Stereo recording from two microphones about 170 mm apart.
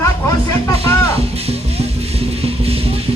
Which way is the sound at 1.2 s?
35° right (ahead or behind).